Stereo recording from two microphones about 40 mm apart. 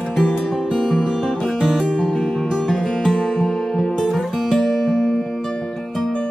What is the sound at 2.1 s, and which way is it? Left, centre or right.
Music, centre.